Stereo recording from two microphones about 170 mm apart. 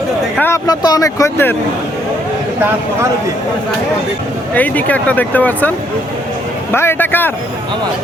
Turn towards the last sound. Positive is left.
turn(degrees=10)  # may be behind; listen again after turning